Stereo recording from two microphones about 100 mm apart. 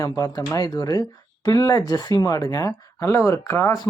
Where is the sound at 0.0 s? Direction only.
35° left (ahead or behind).